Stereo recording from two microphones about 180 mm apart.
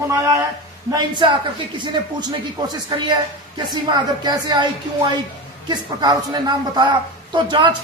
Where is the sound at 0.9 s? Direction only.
25° right (ahead or behind).